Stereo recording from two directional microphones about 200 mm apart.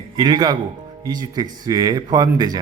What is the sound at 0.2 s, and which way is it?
Speech, 20° right (ahead or behind).